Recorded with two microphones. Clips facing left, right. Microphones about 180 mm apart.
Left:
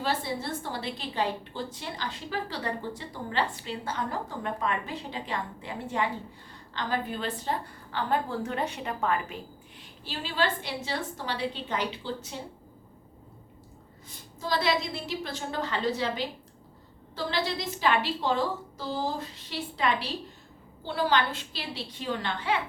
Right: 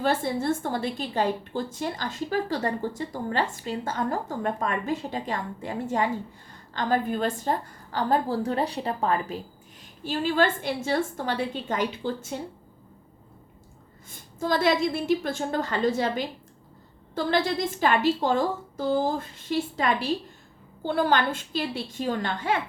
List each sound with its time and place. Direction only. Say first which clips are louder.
0.0 s a woman's voice: right 6 dB; 50° right (ahead or behind); by 9.4 s 35° right (ahead or behind)
10.0 s a woman's voice: right 6 dB; 50° right (ahead or behind)
14.1 s a woman's voice: right 5 dB; 50° right (ahead or behind)